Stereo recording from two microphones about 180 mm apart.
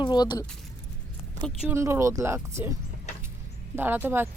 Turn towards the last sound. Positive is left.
turn(degrees=-10)  # may be behind; listen again after turning